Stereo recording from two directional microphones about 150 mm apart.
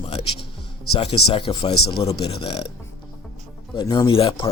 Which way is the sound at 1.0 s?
40° left (ahead or behind).